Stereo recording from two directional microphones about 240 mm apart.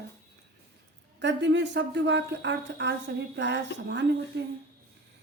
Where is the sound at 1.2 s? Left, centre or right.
Right.